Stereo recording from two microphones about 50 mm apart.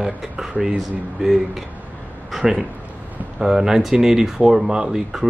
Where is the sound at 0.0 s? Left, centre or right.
Centre.